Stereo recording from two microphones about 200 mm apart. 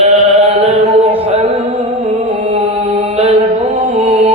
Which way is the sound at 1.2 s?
30° right (ahead or behind).